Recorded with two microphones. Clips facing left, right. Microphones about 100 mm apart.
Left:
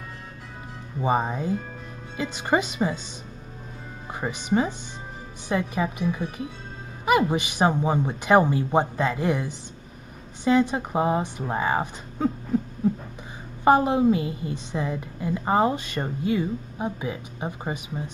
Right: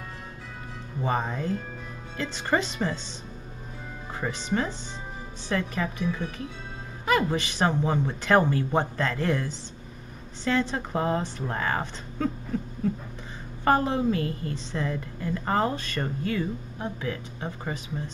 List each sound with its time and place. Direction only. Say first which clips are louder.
1.0 s a woman's voice: left 4 dB; 15° left (ahead or behind)
4.1 s a woman's voice: left 4 dB; 15° left (ahead or behind)
13.7 s a woman's voice: left 5 dB; 15° left (ahead or behind)